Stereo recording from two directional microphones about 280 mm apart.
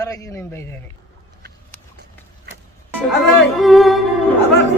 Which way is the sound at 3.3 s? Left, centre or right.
Centre.